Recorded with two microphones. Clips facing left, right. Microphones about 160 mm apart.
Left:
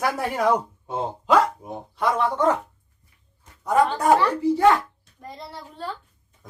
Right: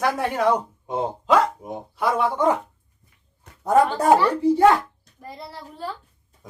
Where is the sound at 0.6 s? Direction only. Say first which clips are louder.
Right 2 dB; 15° right (ahead or behind).